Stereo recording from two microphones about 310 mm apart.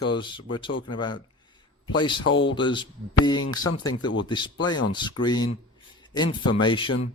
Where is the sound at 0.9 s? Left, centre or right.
Centre.